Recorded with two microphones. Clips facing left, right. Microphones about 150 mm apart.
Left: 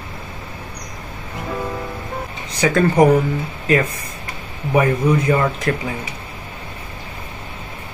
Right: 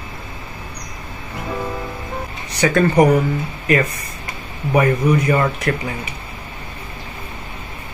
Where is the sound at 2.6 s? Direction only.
15° left (ahead or behind).